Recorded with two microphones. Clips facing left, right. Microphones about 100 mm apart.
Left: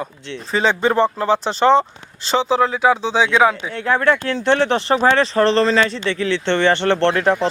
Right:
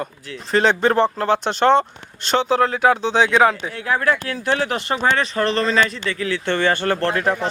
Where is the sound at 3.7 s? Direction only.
30° left (ahead or behind).